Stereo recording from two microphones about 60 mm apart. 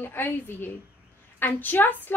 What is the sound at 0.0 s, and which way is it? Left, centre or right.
A woman's voice, left.